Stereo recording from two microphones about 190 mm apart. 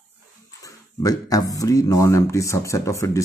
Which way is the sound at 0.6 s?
20° left (ahead or behind).